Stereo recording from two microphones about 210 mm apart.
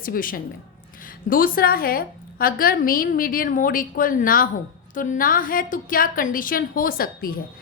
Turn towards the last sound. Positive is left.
turn(degrees=45)  # may be behind; listen again after turning